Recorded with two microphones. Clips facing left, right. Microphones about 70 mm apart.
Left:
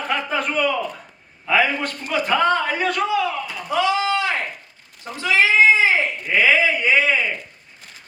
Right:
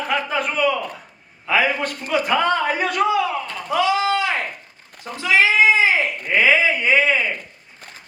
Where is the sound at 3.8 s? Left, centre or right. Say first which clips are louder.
Right 1 dB; right.